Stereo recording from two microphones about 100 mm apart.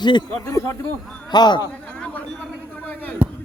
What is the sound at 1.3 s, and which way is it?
Speech, 45° left (ahead or behind).